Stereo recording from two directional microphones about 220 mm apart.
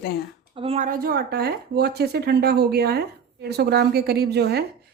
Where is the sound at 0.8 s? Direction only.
45° right (ahead or behind).